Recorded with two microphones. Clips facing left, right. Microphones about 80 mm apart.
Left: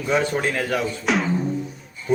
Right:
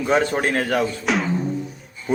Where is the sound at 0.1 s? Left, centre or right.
Right.